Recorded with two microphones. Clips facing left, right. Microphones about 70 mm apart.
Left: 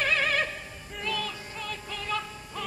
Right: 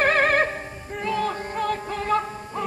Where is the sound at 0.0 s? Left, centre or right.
Right.